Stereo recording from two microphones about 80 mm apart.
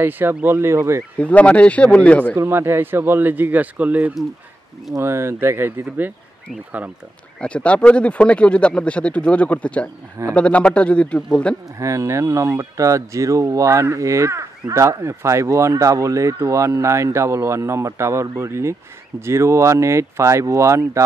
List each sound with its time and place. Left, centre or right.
0.0 s speech: right
1.1 s speech: centre
2.3 s speech: right
5.0 s speech: right
7.3 s speech: centre
11.8 s speech: right